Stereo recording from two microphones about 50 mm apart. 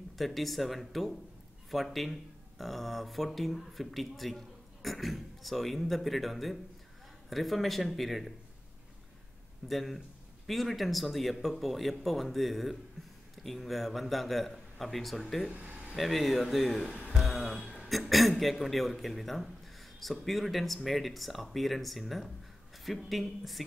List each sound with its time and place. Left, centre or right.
0.2 s speech: centre
9.7 s speech: centre
15.5 s a sound: right
16.0 s speech: centre
17.2 s a sound: centre
17.8 s speech: centre